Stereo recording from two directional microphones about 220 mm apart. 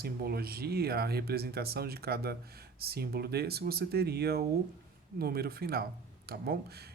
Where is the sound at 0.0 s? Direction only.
45° right (ahead or behind).